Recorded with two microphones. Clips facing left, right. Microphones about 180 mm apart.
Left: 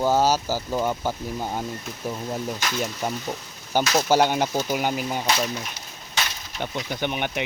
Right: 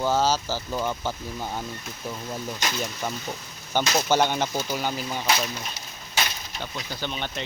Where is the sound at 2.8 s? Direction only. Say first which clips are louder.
Left 3 dB; 15° left (ahead or behind).